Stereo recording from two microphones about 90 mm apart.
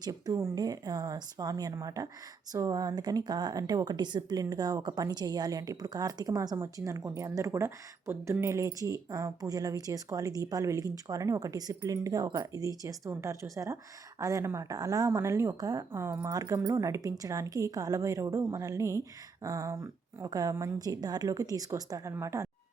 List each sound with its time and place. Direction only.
0.0 s a woman's voice: 45° right (ahead or behind)
16.3 s a woman's voice: 45° right (ahead or behind)